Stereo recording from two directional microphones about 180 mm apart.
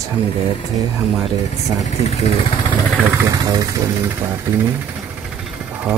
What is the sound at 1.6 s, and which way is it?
Speech, 40° left (ahead or behind).